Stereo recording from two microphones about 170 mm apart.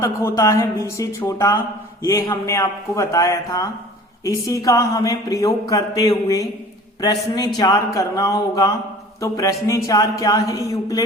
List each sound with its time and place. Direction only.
0.0 s speech: 15° left (ahead or behind)